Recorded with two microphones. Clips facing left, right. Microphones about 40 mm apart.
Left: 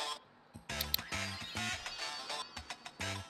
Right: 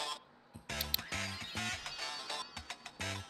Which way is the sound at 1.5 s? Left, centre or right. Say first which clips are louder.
Even; left.